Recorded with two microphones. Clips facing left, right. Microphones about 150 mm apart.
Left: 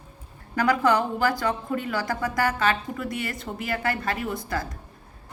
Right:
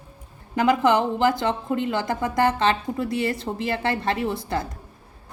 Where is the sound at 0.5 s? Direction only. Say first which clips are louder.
Right 3 dB; 20° right (ahead or behind).